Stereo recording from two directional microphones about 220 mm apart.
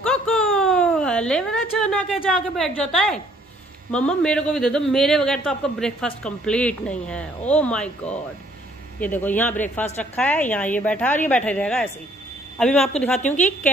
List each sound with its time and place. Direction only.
0.0 s a sound: 5° left (ahead or behind)
2.2 s a man's voice: centre (ahead or behind)
13.2 s a woman's voice: 35° left (ahead or behind)